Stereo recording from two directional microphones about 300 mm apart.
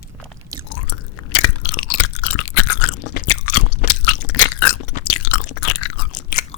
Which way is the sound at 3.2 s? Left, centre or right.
Left.